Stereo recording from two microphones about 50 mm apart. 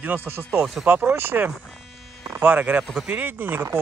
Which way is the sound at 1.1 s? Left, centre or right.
Right.